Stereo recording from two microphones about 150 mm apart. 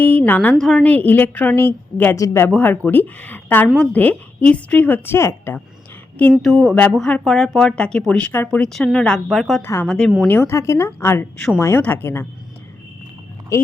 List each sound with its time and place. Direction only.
0.0 s a woman's voice: 10° left (ahead or behind)
6.3 s speech: centre (ahead or behind)
9.6 s a woman's voice: 15° left (ahead or behind)
9.8 s speech: 5° left (ahead or behind)
10.2 s a woman's voice: 15° left (ahead or behind)
13.5 s speech: 20° left (ahead or behind)